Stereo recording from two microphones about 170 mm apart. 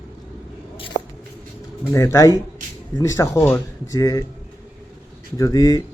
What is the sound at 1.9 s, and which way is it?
Speech, 20° left (ahead or behind).